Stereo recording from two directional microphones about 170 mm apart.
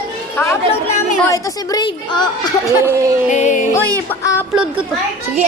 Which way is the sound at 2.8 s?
15° right (ahead or behind).